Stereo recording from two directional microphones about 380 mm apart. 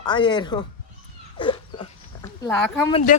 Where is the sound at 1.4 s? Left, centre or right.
Centre.